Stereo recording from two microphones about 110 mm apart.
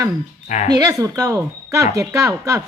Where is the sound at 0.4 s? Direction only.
90° left.